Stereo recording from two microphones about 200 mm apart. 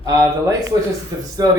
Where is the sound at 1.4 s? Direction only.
20° right (ahead or behind).